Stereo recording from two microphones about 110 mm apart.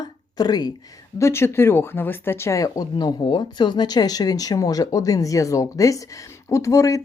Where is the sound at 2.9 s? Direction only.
45° left (ahead or behind).